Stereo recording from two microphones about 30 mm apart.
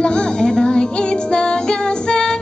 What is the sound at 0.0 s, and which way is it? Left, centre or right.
Music, left.